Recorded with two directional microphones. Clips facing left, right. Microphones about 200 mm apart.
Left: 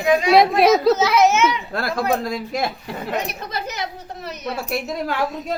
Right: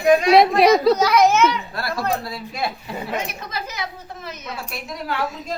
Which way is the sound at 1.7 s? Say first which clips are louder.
Left 3 dB; 55° left (ahead or behind).